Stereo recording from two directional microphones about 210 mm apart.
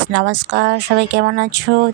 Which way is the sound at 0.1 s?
55° right (ahead or behind).